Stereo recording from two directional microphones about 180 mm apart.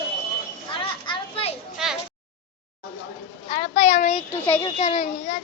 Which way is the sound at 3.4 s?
30° left (ahead or behind).